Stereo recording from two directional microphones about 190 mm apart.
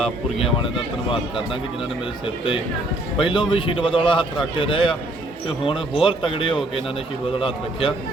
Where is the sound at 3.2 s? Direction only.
25° left (ahead or behind).